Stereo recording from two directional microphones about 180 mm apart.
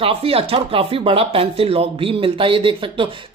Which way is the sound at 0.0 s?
30° right (ahead or behind).